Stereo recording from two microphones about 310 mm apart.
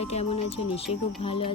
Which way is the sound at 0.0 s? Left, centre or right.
Centre.